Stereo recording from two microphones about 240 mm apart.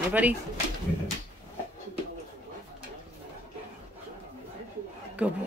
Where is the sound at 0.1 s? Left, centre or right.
Centre.